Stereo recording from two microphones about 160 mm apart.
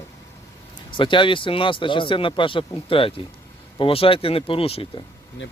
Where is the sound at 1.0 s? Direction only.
30° left (ahead or behind).